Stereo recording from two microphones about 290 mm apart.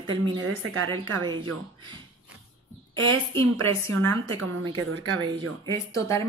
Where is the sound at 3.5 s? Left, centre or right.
Centre.